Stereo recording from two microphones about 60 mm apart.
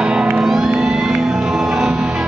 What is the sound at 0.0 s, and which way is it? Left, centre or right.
Music, centre.